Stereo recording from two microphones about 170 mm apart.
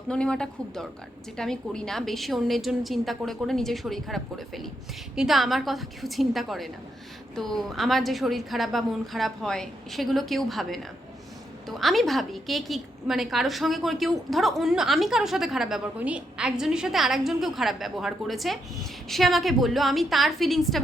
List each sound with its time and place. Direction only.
0.1 s a woman's voice: 5° left (ahead or behind)
11.8 s a woman's voice: centre (ahead or behind)